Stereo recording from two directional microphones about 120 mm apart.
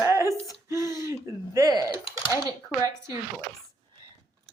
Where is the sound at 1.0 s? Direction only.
25° right (ahead or behind).